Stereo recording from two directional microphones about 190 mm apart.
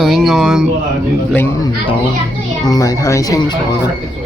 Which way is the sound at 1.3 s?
10° left (ahead or behind).